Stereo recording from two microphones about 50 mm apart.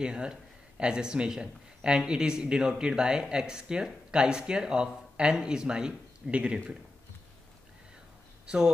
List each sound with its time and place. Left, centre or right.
0.0 s a man's voice: centre
8.5 s a man's voice: centre